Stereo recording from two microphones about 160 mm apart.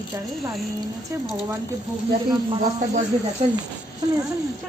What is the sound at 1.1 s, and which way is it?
Speech, 15° right (ahead or behind).